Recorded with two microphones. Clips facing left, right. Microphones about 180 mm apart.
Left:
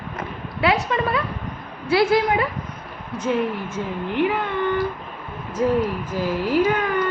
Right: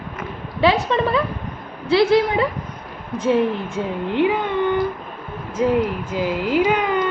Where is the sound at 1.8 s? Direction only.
25° right (ahead or behind).